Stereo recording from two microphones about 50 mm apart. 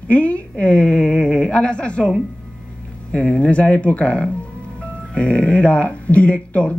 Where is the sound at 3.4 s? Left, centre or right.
Left.